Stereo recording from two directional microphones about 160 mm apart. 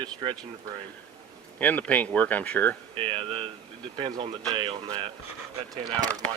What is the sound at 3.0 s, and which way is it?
Speech, 35° right (ahead or behind).